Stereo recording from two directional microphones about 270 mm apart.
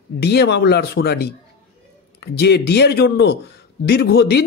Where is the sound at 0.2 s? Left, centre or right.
Left.